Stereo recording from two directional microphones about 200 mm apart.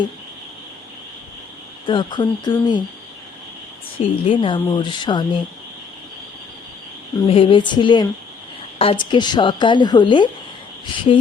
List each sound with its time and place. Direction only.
1.9 s a woman's voice: 20° left (ahead or behind)
3.9 s a woman's voice: 25° left (ahead or behind)
7.3 s a woman's voice: 25° left (ahead or behind)